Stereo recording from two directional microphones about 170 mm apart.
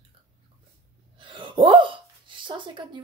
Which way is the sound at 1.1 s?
30° right (ahead or behind).